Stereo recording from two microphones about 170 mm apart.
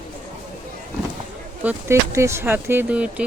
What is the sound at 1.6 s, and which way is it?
Speech, 10° right (ahead or behind).